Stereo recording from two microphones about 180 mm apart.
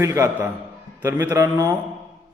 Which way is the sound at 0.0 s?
15° right (ahead or behind).